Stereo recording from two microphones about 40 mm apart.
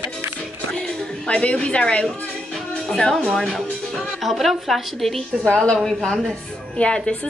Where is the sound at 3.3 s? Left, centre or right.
Centre.